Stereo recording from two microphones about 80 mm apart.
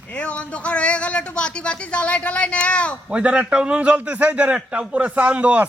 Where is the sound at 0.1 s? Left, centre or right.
Centre.